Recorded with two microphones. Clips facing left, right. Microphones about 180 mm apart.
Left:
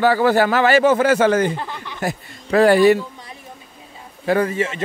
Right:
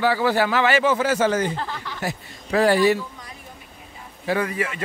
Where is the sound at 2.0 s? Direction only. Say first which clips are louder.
Left 6 dB; 55° left (ahead or behind).